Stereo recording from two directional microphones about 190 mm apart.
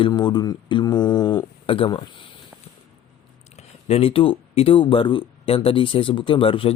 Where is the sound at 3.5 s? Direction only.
30° left (ahead or behind).